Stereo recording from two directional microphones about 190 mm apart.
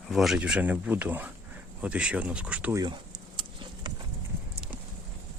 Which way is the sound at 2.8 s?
25° right (ahead or behind).